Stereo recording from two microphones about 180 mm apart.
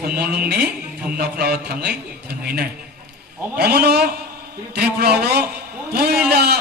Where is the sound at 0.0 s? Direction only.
60° right (ahead or behind).